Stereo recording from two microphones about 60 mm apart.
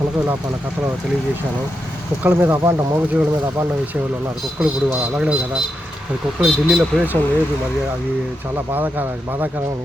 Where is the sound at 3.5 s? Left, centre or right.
Right.